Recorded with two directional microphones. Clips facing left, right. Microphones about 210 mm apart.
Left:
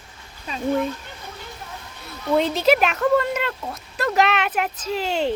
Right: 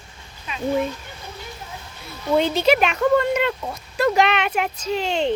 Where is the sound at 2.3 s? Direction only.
Centre (ahead or behind).